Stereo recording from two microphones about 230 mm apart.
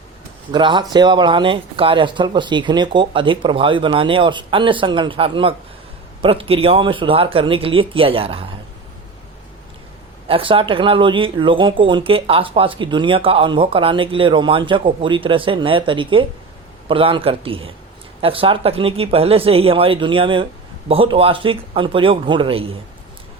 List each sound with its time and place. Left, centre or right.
0.5 s speech: centre
10.2 s speech: right